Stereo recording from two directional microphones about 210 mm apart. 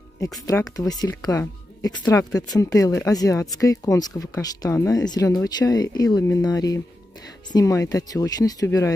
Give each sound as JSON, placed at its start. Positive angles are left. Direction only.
{"t": 0.5, "sound": "speech", "side_deg": 15}